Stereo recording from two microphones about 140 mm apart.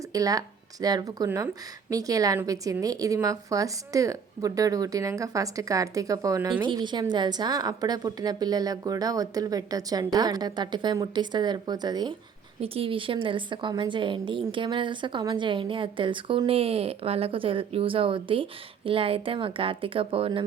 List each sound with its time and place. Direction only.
0.1 s a woman's voice: 25° right (ahead or behind)
6.5 s a woman's voice: 35° right (ahead or behind)
12.6 s a woman's voice: 40° right (ahead or behind)